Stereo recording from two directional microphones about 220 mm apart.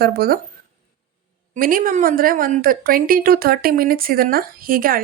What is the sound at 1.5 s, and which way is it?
A woman's voice, 40° right (ahead or behind).